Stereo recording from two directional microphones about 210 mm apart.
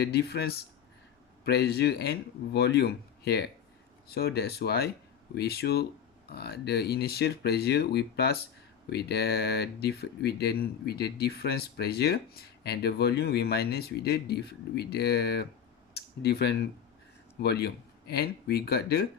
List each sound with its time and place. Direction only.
0.0 s speech: 50° left (ahead or behind)